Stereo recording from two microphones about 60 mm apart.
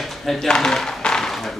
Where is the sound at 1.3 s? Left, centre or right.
Centre.